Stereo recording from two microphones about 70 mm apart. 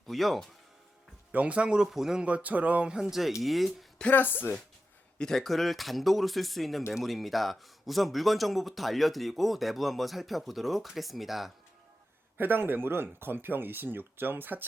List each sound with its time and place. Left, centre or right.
0.1 s speech: centre
1.3 s speech: centre
2.2 s speech: right
2.9 s speech: centre
4.1 s speech: left
5.1 s speech: centre
12.4 s speech: right